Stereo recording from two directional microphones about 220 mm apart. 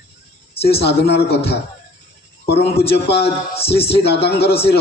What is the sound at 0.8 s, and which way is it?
Speech, 50° left (ahead or behind).